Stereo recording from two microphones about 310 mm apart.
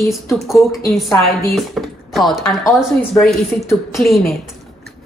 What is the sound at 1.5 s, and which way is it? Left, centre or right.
Speech, centre.